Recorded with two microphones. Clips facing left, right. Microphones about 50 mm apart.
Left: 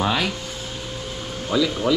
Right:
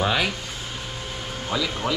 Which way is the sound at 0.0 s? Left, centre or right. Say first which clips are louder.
Left 1 dB; centre.